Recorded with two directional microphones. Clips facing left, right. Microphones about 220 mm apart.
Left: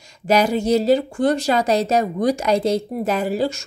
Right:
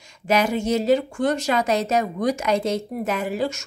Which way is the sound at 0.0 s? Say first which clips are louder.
Left 3 dB; 35° left (ahead or behind).